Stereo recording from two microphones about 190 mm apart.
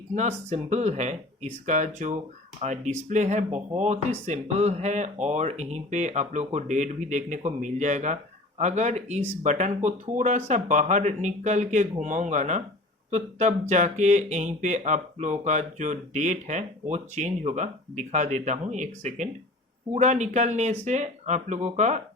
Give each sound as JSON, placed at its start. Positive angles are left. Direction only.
{"t": 0.1, "sound": "speech", "side_deg": -40}